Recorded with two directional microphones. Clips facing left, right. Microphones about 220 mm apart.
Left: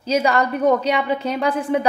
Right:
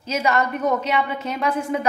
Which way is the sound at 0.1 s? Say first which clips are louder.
Left 3 dB; 35° left (ahead or behind).